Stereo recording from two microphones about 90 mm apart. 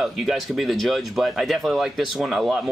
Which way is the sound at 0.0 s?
Centre (ahead or behind).